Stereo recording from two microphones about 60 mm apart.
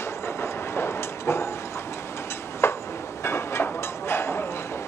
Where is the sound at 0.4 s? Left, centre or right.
Left.